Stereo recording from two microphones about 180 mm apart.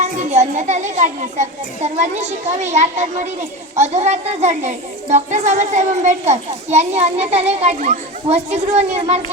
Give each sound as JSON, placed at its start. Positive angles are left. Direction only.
{"t": 0.0, "sound": "a child's voice", "side_deg": -40}